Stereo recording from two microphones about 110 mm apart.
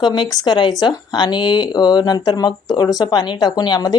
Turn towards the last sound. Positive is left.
turn(degrees=35)  # may be behind; listen again after turning